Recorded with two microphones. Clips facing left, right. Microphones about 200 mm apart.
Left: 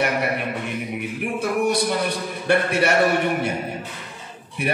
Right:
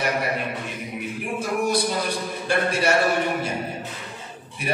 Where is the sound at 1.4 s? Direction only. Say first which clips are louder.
Left 2 dB; 60° left (ahead or behind).